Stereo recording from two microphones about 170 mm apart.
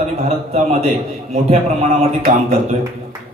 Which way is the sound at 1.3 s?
40° right (ahead or behind).